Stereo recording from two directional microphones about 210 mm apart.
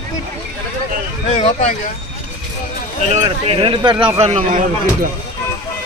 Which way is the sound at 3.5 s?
25° right (ahead or behind).